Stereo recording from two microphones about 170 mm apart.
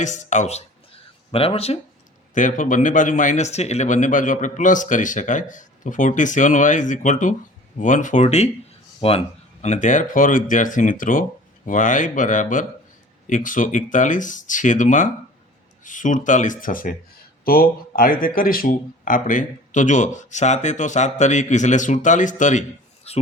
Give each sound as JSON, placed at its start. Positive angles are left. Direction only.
{"t": 0.0, "sound": "speech", "side_deg": 45}
{"t": 2.3, "sound": "speech", "side_deg": 50}
{"t": 23.1, "sound": "speech", "side_deg": 35}